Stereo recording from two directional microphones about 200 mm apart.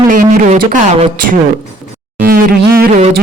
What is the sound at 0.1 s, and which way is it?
Speech, 40° right (ahead or behind).